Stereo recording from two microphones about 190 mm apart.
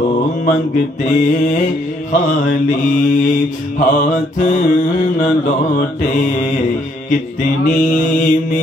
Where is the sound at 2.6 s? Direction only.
45° left (ahead or behind).